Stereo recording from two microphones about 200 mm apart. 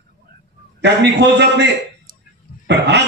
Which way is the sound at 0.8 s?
60° right (ahead or behind).